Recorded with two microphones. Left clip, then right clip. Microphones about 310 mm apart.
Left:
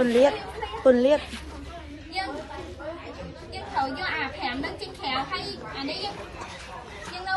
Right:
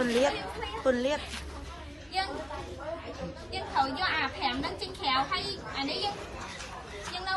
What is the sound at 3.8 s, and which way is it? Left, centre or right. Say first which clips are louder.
A woman's voice: left 1 dB; centre.